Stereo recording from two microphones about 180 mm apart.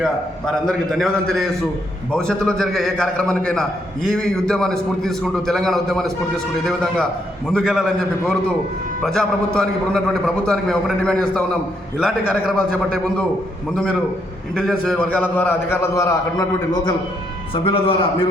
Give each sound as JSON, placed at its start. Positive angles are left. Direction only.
{"t": 0.0, "sound": "a man's voice", "side_deg": 5}
{"t": 9.6, "sound": "a man's voice", "side_deg": 5}
{"t": 14.5, "sound": "a man's voice", "side_deg": 5}